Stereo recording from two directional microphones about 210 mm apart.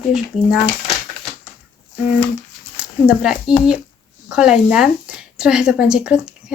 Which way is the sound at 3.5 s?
20° left (ahead or behind).